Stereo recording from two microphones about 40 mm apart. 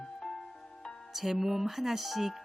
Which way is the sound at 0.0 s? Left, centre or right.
Centre.